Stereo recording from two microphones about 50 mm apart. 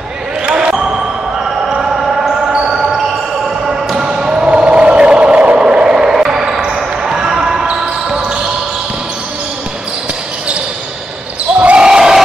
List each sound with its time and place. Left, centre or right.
0.5 s basketball bounce: centre
5.7 s basketball bounce: centre
11.6 s basketball bounce: right